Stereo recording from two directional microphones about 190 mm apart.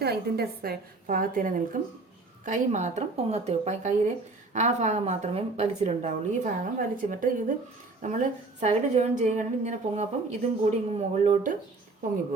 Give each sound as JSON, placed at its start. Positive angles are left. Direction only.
{"t": 0.0, "sound": "a woman's voice", "side_deg": -55}